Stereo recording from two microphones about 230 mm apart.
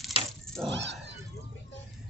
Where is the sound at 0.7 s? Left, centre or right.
Right.